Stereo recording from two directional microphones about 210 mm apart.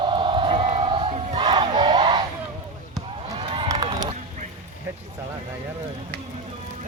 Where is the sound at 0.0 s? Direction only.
25° right (ahead or behind).